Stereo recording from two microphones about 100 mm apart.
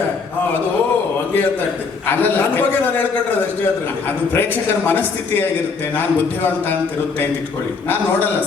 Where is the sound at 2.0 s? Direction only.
20° left (ahead or behind).